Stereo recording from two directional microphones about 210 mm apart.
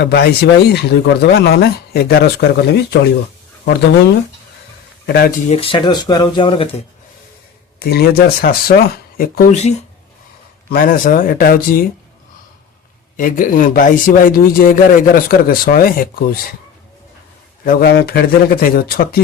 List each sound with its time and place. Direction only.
0.0 s speech: 50° left (ahead or behind)
5.5 s speech: 25° left (ahead or behind)
7.8 s speech: 50° left (ahead or behind)
10.7 s speech: 45° left (ahead or behind)
13.1 s speech: 40° left (ahead or behind)
17.7 s speech: 45° left (ahead or behind)